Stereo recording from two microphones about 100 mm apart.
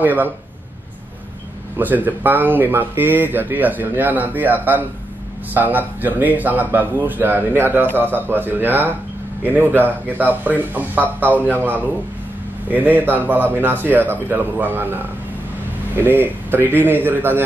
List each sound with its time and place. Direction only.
0.0 s speech: 20° right (ahead or behind)
1.8 s a man's voice: 20° right (ahead or behind)